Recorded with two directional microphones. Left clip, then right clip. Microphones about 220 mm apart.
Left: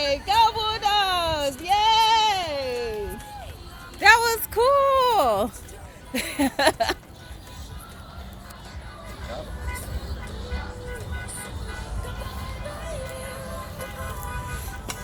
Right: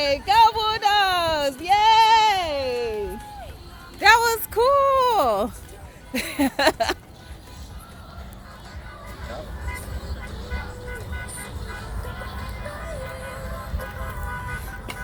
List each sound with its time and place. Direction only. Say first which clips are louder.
0.0 s child singing: right 3 dB; 30° right (ahead or behind)
1.6 s goat: right 3 dB; 25° right (ahead or behind)
4.0 s a sound: right 1 dB; 15° right (ahead or behind)
6.1 s speech: right 1 dB; 10° right (ahead or behind)